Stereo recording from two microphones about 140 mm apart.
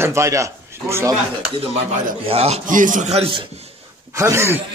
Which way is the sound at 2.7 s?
70° right (ahead or behind).